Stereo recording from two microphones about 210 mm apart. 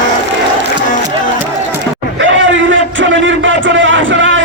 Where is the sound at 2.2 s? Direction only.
65° right (ahead or behind).